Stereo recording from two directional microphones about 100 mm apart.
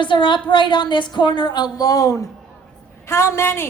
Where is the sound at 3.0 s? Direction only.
25° left (ahead or behind).